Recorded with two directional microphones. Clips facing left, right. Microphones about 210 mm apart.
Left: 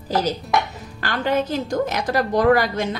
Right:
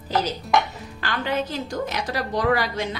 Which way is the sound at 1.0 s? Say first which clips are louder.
Left 4 dB; 45° left (ahead or behind).